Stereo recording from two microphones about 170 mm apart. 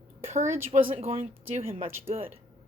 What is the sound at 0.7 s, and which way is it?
A woman's voice, 35° right (ahead or behind).